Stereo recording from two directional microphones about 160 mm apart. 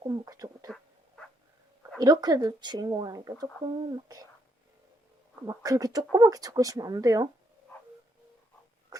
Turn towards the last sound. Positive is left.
turn(degrees=-25)  # may be behind; listen again after turning